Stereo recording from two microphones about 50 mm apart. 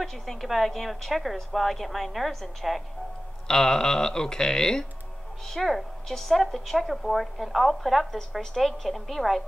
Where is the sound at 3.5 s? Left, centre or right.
Centre.